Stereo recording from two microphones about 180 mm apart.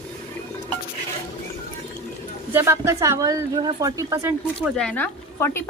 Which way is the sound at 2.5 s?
15° right (ahead or behind).